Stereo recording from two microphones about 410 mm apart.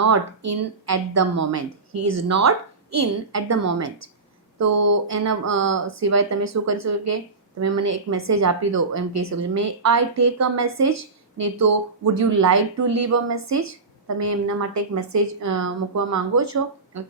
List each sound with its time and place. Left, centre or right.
0.0 s a woman's voice: right